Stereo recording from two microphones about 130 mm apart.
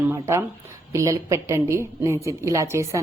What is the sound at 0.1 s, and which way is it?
Speech, 20° right (ahead or behind).